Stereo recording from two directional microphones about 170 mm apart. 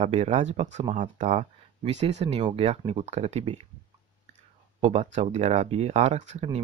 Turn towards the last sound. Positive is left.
turn(degrees=-45)  # may be behind; listen again after turning